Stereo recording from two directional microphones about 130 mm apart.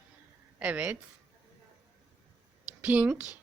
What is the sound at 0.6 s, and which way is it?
Speech, 10° right (ahead or behind).